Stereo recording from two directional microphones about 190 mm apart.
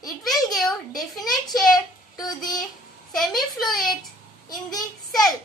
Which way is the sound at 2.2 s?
20° left (ahead or behind).